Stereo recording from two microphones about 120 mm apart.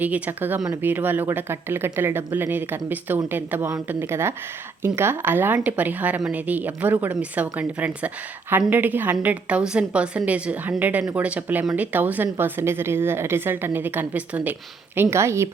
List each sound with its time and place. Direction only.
0.0 s a woman's voice: 15° right (ahead or behind)